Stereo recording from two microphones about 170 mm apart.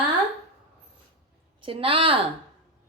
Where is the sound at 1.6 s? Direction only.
35° right (ahead or behind).